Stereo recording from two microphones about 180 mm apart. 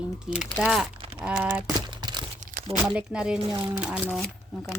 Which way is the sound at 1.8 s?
25° right (ahead or behind).